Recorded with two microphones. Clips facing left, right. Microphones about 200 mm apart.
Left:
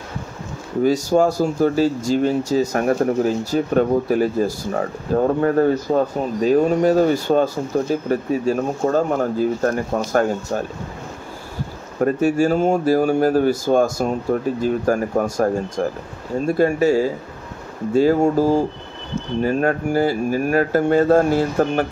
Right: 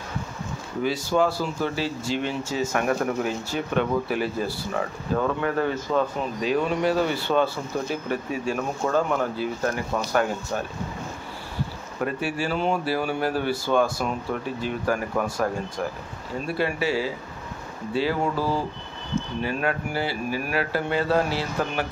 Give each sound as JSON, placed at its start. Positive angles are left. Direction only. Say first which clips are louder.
{"t": 0.8, "sound": "speech", "louder": "left 6 dB", "side_deg": 45}
{"t": 12.0, "sound": "speech", "louder": "left 10 dB", "side_deg": 45}